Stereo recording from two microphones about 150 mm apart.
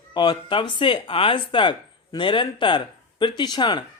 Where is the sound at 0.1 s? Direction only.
30° left (ahead or behind).